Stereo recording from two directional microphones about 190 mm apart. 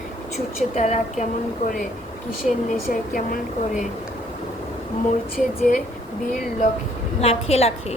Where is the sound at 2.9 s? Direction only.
50° left (ahead or behind).